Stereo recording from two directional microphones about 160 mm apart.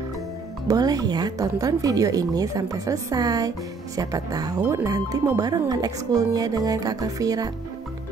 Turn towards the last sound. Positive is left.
turn(degrees=-20)  # may be behind; listen again after turning